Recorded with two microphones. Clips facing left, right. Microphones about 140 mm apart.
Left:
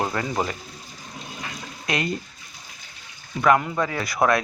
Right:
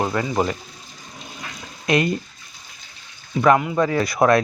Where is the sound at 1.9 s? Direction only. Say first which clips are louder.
Right 7 dB; 20° right (ahead or behind).